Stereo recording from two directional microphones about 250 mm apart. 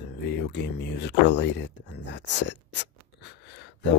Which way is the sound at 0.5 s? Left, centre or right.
Left.